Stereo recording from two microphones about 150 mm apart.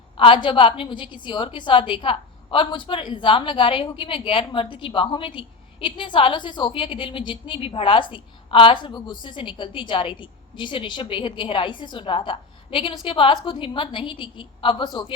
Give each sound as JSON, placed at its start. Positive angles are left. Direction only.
{"t": 0.2, "sound": "a woman's voice", "side_deg": 35}